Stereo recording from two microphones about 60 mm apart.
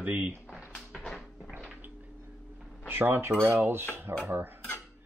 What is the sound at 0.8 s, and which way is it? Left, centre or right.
Music, centre.